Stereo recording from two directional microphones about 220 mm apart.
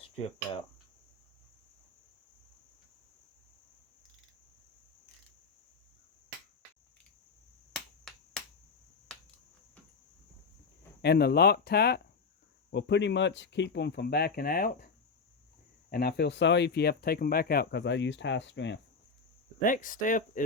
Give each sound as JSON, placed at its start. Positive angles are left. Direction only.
{"t": 7.7, "sound": "finger snapping", "side_deg": 5}
{"t": 11.0, "sound": "speech", "side_deg": 45}
{"t": 15.9, "sound": "speech", "side_deg": 45}
{"t": 19.6, "sound": "speech", "side_deg": 35}